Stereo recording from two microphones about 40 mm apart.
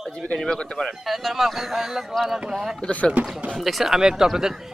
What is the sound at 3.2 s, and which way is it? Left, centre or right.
Speech, right.